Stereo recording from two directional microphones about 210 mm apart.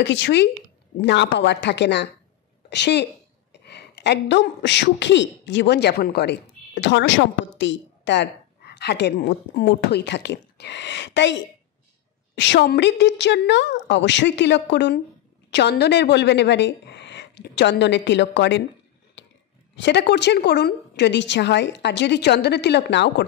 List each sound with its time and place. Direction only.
0.0 s a woman's voice: 60° left (ahead or behind)
19.2 s a sound: 60° left (ahead or behind)
19.7 s a woman's voice: 55° left (ahead or behind)